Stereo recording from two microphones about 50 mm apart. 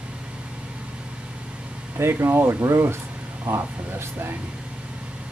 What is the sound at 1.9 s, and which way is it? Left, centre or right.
Speech, right.